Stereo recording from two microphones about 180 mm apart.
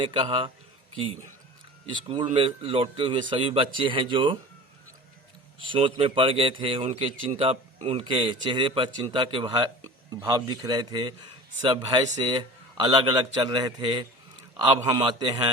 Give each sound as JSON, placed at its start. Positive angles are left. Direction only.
{"t": 0.0, "sound": "speech", "side_deg": -30}
{"t": 2.3, "sound": "speech", "side_deg": -30}
{"t": 5.5, "sound": "a man's voice", "side_deg": -30}